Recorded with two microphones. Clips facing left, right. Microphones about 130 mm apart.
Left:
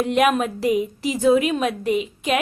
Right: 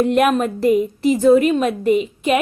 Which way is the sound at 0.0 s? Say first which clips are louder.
Right 3 dB; centre (ahead or behind).